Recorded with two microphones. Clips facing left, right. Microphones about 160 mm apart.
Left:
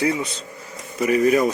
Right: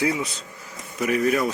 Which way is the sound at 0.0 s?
5° right (ahead or behind).